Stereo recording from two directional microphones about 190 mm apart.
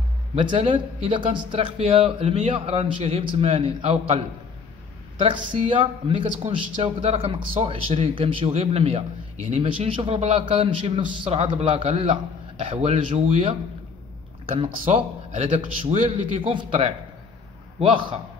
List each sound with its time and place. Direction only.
0.4 s speech: 25° right (ahead or behind)
5.2 s speech: 30° right (ahead or behind)
14.5 s speech: 30° right (ahead or behind)